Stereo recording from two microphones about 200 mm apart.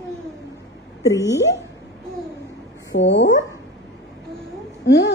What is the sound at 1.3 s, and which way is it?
Speech, 60° left (ahead or behind).